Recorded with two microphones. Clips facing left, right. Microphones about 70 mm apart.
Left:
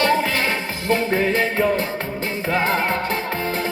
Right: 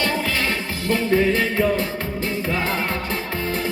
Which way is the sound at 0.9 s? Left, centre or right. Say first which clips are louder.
Right 1 dB; left.